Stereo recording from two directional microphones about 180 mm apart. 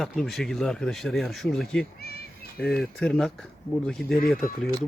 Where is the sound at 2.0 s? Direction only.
60° left (ahead or behind).